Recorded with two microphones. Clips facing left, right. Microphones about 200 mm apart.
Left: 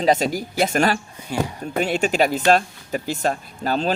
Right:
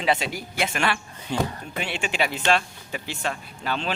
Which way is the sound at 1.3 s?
10° left (ahead or behind).